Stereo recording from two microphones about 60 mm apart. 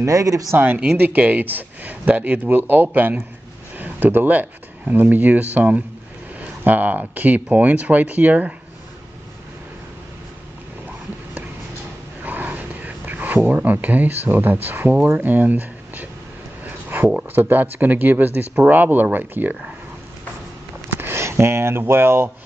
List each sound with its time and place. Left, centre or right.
0.0 s speech: right
0.9 s speech: right
12.2 s a sound: right
13.5 s speech: right
16.6 s a sound: right
17.3 s speech: right
21.0 s speech: right